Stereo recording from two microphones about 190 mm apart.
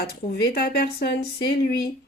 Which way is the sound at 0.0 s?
55° left (ahead or behind).